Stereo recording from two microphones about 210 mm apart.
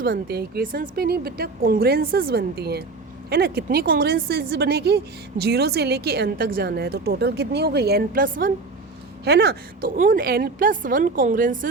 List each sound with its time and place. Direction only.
0.0 s a woman's voice: 45° right (ahead or behind)